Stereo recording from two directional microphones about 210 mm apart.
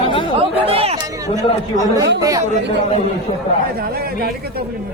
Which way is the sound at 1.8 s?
15° right (ahead or behind).